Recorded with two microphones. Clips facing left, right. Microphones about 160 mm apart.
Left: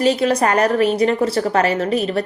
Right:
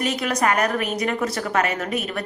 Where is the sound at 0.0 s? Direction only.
30° left (ahead or behind).